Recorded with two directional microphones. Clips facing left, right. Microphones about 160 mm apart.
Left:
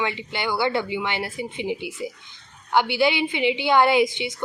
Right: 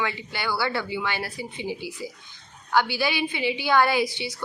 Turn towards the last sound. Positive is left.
turn(degrees=20)  # may be behind; listen again after turning